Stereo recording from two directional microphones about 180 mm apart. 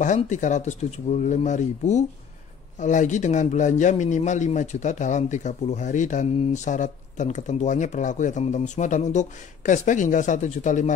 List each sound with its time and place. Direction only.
0.0 s a man's voice: 45° left (ahead or behind)